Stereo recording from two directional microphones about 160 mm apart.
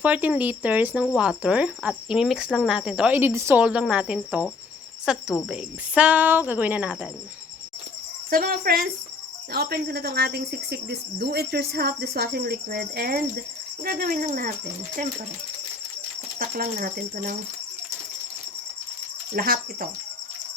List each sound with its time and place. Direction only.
0.0 s speech: 10° right (ahead or behind)
8.3 s speech: 65° right (ahead or behind)
9.5 s speech: 75° right (ahead or behind); by 14.5 s 60° right (ahead or behind)
16.4 s speech: 60° right (ahead or behind)
19.4 s speech: 65° right (ahead or behind)